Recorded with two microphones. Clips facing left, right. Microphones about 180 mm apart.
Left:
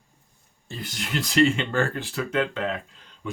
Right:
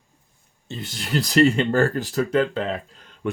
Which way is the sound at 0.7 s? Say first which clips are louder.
Right 4 dB; 25° right (ahead or behind).